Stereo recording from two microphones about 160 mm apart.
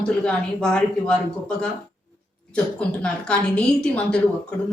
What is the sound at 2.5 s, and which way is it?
A woman's voice, 5° left (ahead or behind).